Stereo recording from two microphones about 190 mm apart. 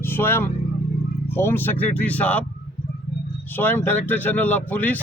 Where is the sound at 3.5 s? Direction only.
10° left (ahead or behind).